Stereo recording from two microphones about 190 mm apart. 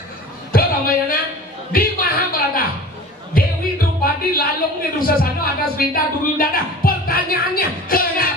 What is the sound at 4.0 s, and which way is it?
Music, 50° left (ahead or behind).